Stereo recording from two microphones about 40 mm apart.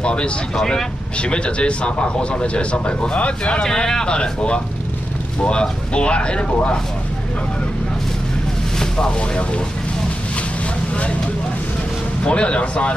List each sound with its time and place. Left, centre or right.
0.0 s a sound: left
0.6 s speech: centre
1.1 s speech: left
3.6 s speech: centre
8.7 s speech: centre
12.2 s speech: left